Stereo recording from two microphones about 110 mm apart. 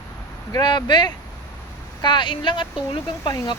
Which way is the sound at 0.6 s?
45° left (ahead or behind).